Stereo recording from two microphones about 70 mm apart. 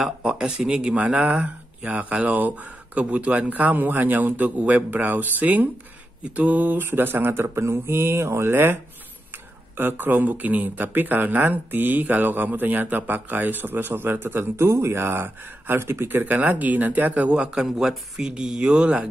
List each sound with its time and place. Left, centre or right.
0.0 s speech: centre; by 8.7 s right
9.8 s speech: right